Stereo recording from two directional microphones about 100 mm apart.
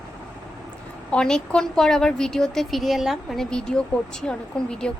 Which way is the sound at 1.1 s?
10° left (ahead or behind).